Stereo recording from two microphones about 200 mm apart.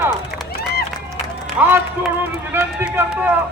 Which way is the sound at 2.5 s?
10° right (ahead or behind).